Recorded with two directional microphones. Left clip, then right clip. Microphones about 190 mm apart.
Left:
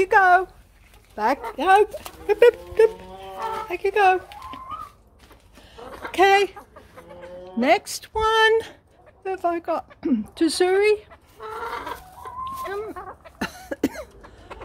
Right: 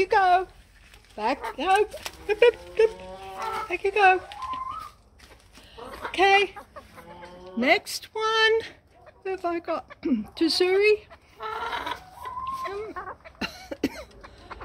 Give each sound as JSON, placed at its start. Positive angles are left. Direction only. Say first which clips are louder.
{"t": 0.0, "sound": "speech", "louder": "left 4 dB", "side_deg": 15}
{"t": 6.1, "sound": "speech", "louder": "left 3 dB", "side_deg": 20}
{"t": 7.5, "sound": "speech", "louder": "left 3 dB", "side_deg": 15}
{"t": 11.4, "sound": "chicken", "louder": "even", "side_deg": -35}
{"t": 13.4, "sound": "cough", "louder": "left 4 dB", "side_deg": 20}